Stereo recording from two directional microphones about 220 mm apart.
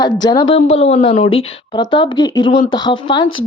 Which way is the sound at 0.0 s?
20° left (ahead or behind).